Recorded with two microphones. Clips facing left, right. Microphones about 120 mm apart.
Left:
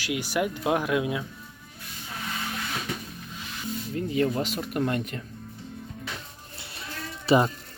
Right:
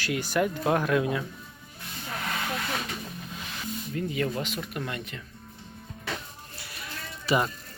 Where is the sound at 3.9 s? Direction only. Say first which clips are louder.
Left 4 dB; 30° left (ahead or behind).